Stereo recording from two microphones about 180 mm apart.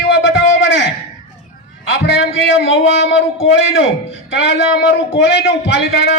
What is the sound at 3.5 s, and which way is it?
A man's voice, 90° left.